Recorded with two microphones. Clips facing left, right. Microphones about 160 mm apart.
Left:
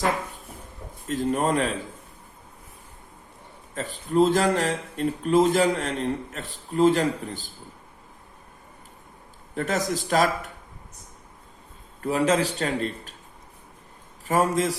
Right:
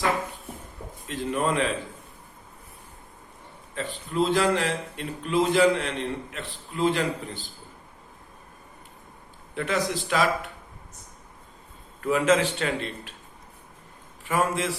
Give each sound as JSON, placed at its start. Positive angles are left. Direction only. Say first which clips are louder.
{"t": 1.0, "sound": "speech", "louder": "left 3 dB", "side_deg": 45}
{"t": 3.8, "sound": "speech", "louder": "left 5 dB", "side_deg": 45}
{"t": 9.6, "sound": "speech", "louder": "left 1 dB", "side_deg": 45}
{"t": 11.9, "sound": "a man's voice", "louder": "even", "side_deg": 35}
{"t": 14.3, "sound": "a man's voice", "louder": "left 3 dB", "side_deg": 40}